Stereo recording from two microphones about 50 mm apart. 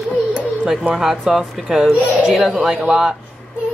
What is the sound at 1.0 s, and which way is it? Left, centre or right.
Speech, centre.